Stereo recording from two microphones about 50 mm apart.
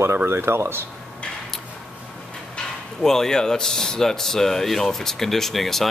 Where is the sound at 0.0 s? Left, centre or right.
Right.